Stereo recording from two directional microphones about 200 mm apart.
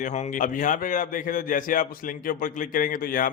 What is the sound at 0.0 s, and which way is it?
A man's voice, 35° left (ahead or behind).